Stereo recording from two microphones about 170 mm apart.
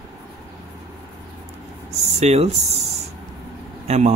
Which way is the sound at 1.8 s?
40° right (ahead or behind).